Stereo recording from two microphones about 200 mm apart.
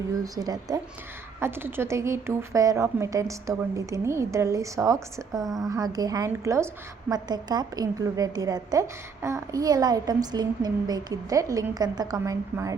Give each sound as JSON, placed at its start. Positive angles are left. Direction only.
{"t": 0.3, "sound": "a woman's voice", "side_deg": -20}